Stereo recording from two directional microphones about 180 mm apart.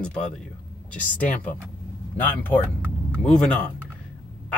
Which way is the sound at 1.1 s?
10° left (ahead or behind).